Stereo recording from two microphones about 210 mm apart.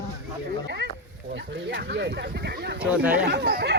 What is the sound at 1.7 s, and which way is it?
Speech, 55° right (ahead or behind).